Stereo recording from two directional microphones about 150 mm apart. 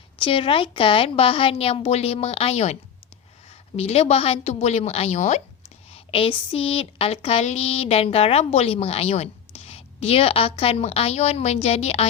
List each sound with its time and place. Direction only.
0.2 s speech: 35° left (ahead or behind)
3.8 s a woman's voice: 45° left (ahead or behind)
5.9 s speech: 40° left (ahead or behind)